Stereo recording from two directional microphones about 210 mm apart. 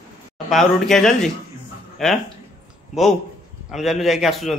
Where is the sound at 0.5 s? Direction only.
Centre (ahead or behind).